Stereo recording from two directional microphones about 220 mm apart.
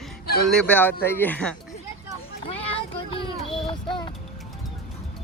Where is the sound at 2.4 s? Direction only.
25° left (ahead or behind).